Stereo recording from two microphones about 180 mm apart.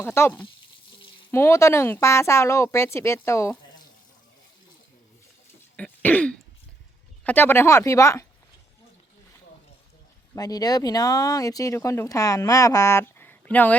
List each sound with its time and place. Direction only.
0.0 s speech: 15° left (ahead or behind)
5.7 s throat clearing: 10° left (ahead or behind)
7.3 s speech: 10° left (ahead or behind)
10.3 s speech: 20° left (ahead or behind)